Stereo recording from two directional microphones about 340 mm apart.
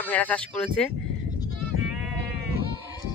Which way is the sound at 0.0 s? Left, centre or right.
Centre.